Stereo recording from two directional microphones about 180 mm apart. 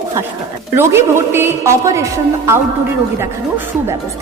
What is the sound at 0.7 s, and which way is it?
A woman's voice, 15° right (ahead or behind).